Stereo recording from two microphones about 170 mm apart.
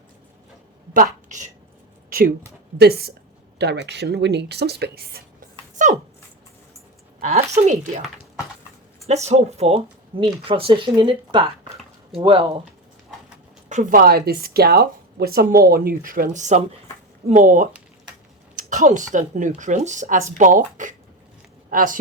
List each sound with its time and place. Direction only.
0.9 s a woman's voice: 45° right (ahead or behind)
2.0 s a sound: 55° right (ahead or behind)
2.7 s speech: 70° right (ahead or behind)
3.6 s speech: 80° right; by 5.2 s 65° right (ahead or behind)
5.7 s dog: 45° right (ahead or behind)
7.2 s speech: 40° right (ahead or behind)
9.0 s speech: 40° right (ahead or behind)
13.7 s a woman's voice: 50° right (ahead or behind)